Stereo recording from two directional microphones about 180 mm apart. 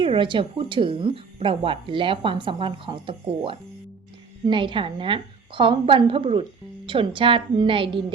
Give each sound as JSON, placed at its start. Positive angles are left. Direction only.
{"t": 0.0, "sound": "speech", "side_deg": -30}